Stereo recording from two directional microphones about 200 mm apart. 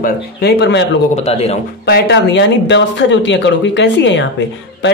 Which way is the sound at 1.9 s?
55° left (ahead or behind).